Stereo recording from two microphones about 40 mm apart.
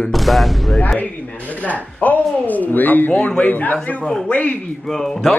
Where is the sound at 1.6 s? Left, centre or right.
Left.